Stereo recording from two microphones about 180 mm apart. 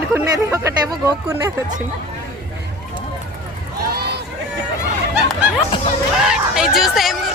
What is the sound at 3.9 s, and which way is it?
Run, 65° right (ahead or behind).